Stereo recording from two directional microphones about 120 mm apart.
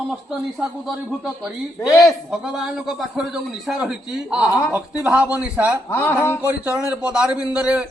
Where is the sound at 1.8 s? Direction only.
30° left (ahead or behind).